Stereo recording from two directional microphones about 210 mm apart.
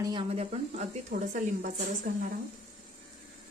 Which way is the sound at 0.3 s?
30° right (ahead or behind).